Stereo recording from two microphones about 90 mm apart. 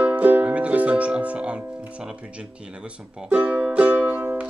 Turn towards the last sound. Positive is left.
turn(degrees=-20)  # may be behind; listen again after turning